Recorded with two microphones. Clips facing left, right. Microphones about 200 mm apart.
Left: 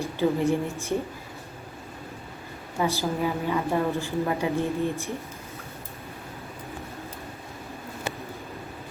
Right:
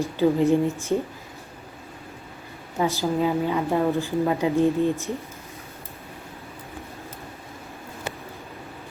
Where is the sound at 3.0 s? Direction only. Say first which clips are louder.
Right 4 dB; 15° right (ahead or behind).